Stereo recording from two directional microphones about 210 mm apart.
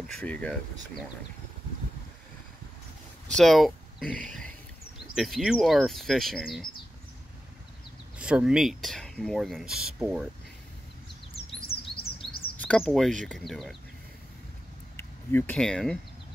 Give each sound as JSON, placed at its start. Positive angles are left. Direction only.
{"t": 0.0, "sound": "speech", "side_deg": 5}
{"t": 3.3, "sound": "speech", "side_deg": 0}
{"t": 8.2, "sound": "speech", "side_deg": -5}
{"t": 11.6, "sound": "bird", "side_deg": 50}
{"t": 12.6, "sound": "speech", "side_deg": 5}
{"t": 15.0, "sound": "speech", "side_deg": 10}